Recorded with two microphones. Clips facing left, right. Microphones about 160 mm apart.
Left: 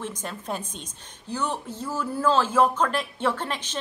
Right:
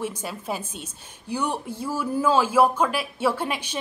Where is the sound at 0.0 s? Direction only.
10° right (ahead or behind).